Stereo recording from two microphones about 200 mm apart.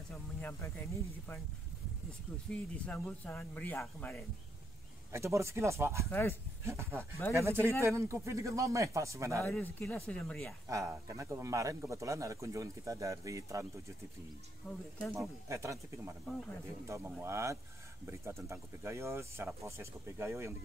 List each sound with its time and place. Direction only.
0.1 s speech: 10° left (ahead or behind)
2.5 s speech: 5° left (ahead or behind)
5.1 s speech: 15° right (ahead or behind)
7.0 s speech: 10° left (ahead or behind)
7.3 s speech: 15° right (ahead or behind)
9.4 s speech: 10° left (ahead or behind)
10.7 s speech: 15° right (ahead or behind)
15.1 s speech: 15° right (ahead or behind)
16.8 s speech: 15° right (ahead or behind)